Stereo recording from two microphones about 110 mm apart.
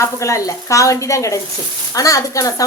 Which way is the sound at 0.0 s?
30° left (ahead or behind).